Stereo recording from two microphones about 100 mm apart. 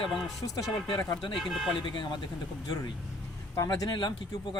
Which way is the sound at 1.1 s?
50° left (ahead or behind).